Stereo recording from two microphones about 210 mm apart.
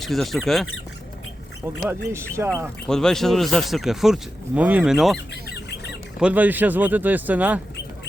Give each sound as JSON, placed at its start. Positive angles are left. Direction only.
{"t": 0.0, "sound": "speech", "side_deg": 0}
{"t": 1.9, "sound": "speech", "side_deg": -10}
{"t": 2.8, "sound": "speech", "side_deg": 5}
{"t": 5.3, "sound": "goose", "side_deg": 55}
{"t": 6.1, "sound": "speech", "side_deg": -5}